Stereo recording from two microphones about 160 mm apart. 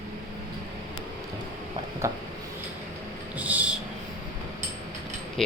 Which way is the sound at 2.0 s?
20° right (ahead or behind).